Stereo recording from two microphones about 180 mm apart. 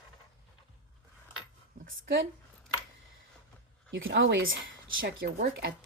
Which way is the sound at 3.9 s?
90° right.